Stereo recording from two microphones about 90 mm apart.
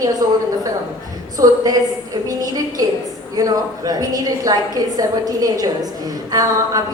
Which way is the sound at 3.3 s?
45° right (ahead or behind).